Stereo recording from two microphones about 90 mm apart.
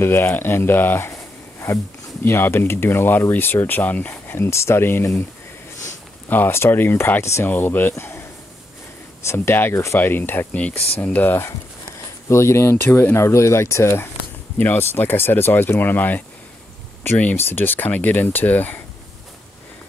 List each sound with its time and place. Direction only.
0.0 s speech: 25° left (ahead or behind)
2.2 s speech: 25° left (ahead or behind)
5.8 s a sound: 35° left (ahead or behind)
6.3 s speech: 25° left (ahead or behind)
7.9 s speech: 30° left (ahead or behind)
9.2 s speech: 30° left (ahead or behind)